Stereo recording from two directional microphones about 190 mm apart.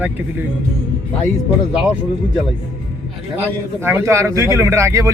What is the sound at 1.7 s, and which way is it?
Speech, 5° right (ahead or behind).